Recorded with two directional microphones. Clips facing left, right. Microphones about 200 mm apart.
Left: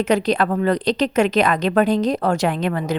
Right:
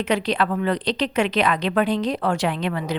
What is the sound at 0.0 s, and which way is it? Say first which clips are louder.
A woman's voice: left 4 dB; 45° left (ahead or behind).